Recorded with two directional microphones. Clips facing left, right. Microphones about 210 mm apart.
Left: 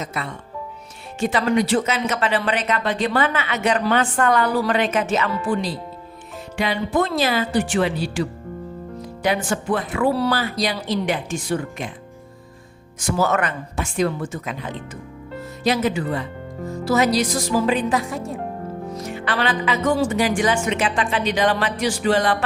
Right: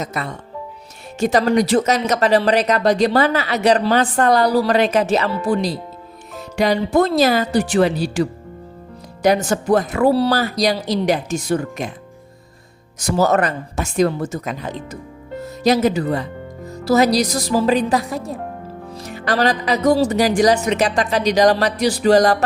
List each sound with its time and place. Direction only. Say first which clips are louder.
0.0 s speech: right 3 dB; 40° right (ahead or behind)
13.0 s speech: right 4 dB; 40° right (ahead or behind)